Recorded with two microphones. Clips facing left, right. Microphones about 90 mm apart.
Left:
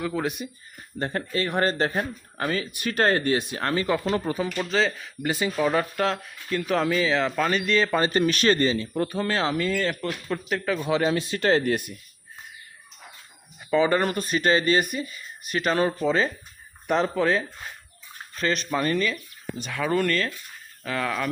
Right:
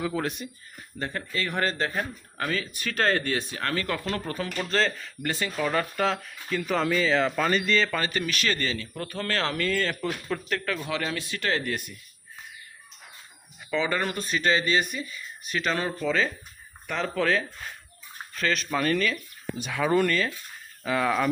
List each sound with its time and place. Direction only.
0.0 s speech: centre (ahead or behind)
0.9 s speech: 45° left (ahead or behind)
1.9 s speech: 30° left (ahead or behind)
2.6 s speech: 15° left (ahead or behind)
4.6 s speech: 5° left (ahead or behind)
6.0 s speech: centre (ahead or behind)
7.9 s speech: 30° left (ahead or behind); by 10.8 s 10° left (ahead or behind)
10.8 s speech: 25° left (ahead or behind)
13.7 s speech: 45° left (ahead or behind)
15.9 s speech: 25° left (ahead or behind)
18.8 s speech: 20° left (ahead or behind)
19.6 s speech: 5° right (ahead or behind)